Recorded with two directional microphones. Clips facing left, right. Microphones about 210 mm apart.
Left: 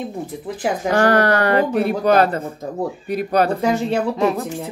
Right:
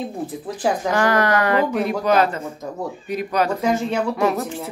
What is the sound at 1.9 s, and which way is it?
Speech, 55° left (ahead or behind).